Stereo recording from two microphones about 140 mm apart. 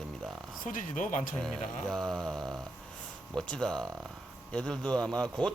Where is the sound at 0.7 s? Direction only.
65° left (ahead or behind).